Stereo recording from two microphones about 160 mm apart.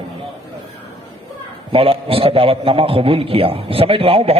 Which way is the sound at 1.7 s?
35° right (ahead or behind).